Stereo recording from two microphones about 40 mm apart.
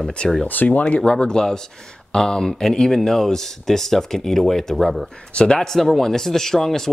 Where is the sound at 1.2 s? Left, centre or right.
Centre.